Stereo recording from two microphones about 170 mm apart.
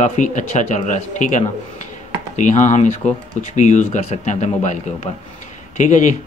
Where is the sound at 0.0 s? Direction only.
45° left (ahead or behind).